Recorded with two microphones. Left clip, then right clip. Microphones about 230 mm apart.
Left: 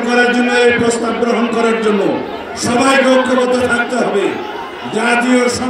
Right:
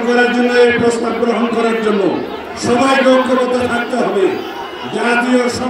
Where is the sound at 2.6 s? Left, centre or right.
Left.